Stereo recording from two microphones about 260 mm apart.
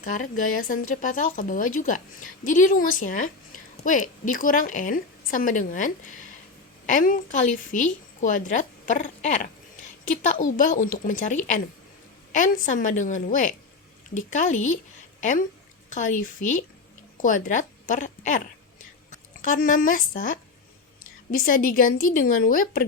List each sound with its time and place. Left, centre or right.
0.0 s a woman's voice: left